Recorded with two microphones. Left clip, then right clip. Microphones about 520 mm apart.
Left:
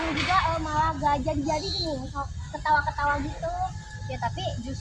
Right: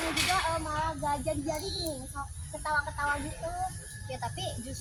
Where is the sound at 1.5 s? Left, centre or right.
Centre.